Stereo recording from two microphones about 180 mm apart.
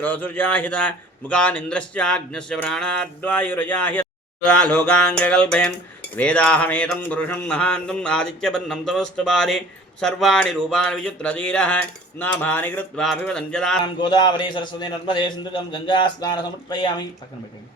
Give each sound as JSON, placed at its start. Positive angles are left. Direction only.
{"t": 0.0, "sound": "a man's voice", "side_deg": 10}
{"t": 4.4, "sound": "a sound", "side_deg": 5}
{"t": 13.8, "sound": "a man's voice", "side_deg": 25}